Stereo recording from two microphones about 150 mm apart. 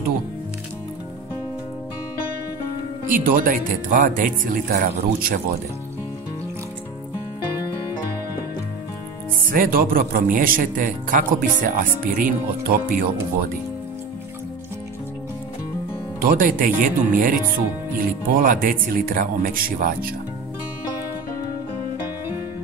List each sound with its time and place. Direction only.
3.1 s speech: 65° right (ahead or behind); by 5.4 s 80° right
9.5 s speech: 70° right (ahead or behind)
16.2 s speech: 75° right (ahead or behind)